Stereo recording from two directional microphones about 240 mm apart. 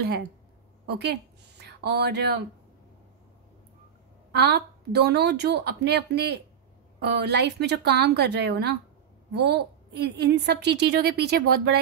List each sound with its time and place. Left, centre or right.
0.8 s speech: right
4.3 s a woman's voice: right